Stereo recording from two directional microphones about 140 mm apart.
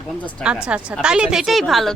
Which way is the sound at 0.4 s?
5° right (ahead or behind).